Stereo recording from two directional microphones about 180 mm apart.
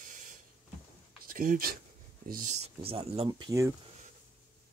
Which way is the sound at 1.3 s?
50° right (ahead or behind).